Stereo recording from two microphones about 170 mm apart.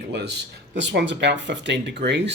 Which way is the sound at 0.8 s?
90° right.